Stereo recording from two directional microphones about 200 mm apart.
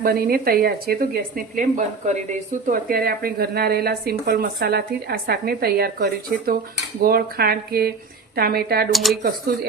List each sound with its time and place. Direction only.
0.0 s speech: 50° right (ahead or behind)
2.6 s speech: 50° right (ahead or behind)
8.9 s speech: centre (ahead or behind)